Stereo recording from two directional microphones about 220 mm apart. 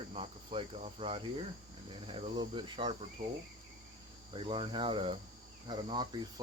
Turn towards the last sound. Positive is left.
turn(degrees=-20)  # may be behind; listen again after turning